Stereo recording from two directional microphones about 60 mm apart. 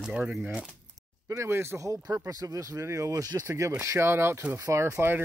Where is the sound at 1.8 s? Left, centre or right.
Right.